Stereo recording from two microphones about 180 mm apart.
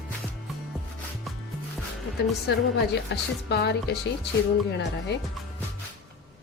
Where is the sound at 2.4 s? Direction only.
65° left (ahead or behind).